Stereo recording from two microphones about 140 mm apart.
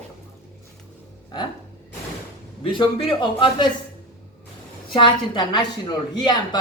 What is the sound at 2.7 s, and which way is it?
Speech, 35° left (ahead or behind).